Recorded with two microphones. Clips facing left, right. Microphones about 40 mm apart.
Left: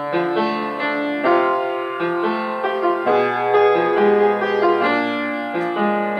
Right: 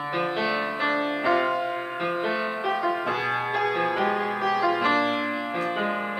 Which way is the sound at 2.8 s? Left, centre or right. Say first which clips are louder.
Left 9 dB; centre.